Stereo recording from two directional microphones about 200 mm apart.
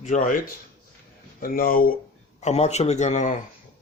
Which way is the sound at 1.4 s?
45° left (ahead or behind).